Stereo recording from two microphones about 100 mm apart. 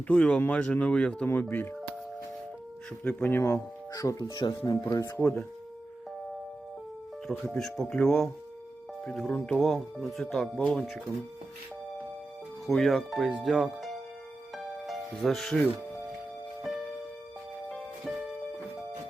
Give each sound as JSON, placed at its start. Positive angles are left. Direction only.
{"t": 0.1, "sound": "speech", "side_deg": 10}
{"t": 3.0, "sound": "speech", "side_deg": 15}
{"t": 3.4, "sound": "speech", "side_deg": 35}
{"t": 5.1, "sound": "speech", "side_deg": 20}
{"t": 7.6, "sound": "speech", "side_deg": 5}
{"t": 12.6, "sound": "speech", "side_deg": 0}
{"t": 14.5, "sound": "music", "side_deg": 0}
{"t": 16.7, "sound": "music", "side_deg": 0}